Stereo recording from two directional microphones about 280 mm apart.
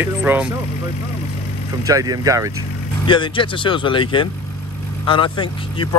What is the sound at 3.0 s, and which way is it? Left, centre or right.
Speech, centre.